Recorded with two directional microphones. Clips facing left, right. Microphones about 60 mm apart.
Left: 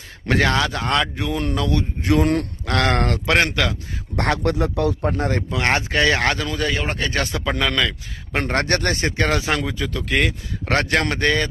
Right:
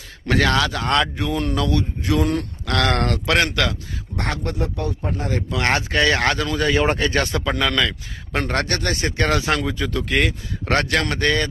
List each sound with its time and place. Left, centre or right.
0.3 s speech: centre
2.0 s speech: left
2.6 s a man's voice: left
3.0 s speech: centre
4.2 s speech: left
5.5 s speech: centre
8.3 s a man's voice: centre
8.6 s speech: left
9.4 s speech: centre
10.8 s a man's voice: centre